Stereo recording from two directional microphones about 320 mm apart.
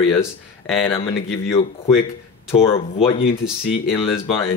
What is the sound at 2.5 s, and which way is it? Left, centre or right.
Speech, centre.